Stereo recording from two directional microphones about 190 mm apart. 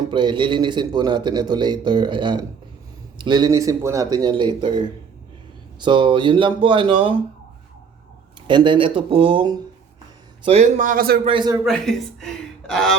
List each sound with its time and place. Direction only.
0.0 s a man's voice: 25° right (ahead or behind)
8.4 s a man's voice: 25° right (ahead or behind); by 11.2 s 50° right (ahead or behind)
11.3 s a man's voice: 20° right (ahead or behind)
11.6 s a man's voice: centre (ahead or behind)